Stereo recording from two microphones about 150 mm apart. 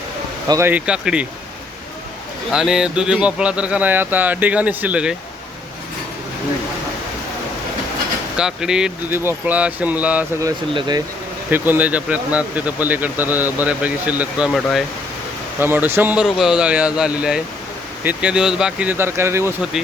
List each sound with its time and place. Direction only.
0.4 s speech: 25° right (ahead or behind)
0.7 s speech: 5° right (ahead or behind)
2.5 s speech: 5° right (ahead or behind)
8.4 s speech: 5° right (ahead or behind)
10.8 s speech: 30° right (ahead or behind)
11.5 s speech: 10° right (ahead or behind)
15.5 s speech: 15° right (ahead or behind)